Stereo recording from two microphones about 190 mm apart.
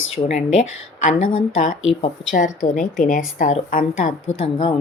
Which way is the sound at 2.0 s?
40° left (ahead or behind).